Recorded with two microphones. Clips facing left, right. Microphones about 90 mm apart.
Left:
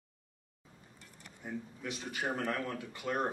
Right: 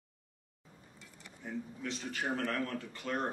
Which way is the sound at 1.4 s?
15° left (ahead or behind).